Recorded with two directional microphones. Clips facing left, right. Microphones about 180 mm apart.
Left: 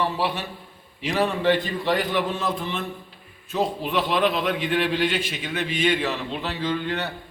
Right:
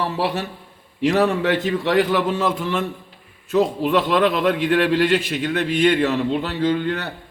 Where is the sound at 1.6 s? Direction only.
90° right.